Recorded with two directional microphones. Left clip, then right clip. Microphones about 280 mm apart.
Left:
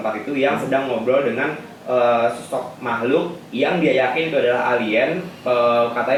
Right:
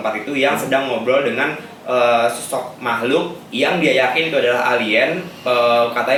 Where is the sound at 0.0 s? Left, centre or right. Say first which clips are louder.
Right 2 dB; centre.